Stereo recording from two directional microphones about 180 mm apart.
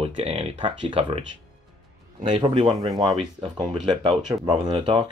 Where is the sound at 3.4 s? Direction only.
30° right (ahead or behind).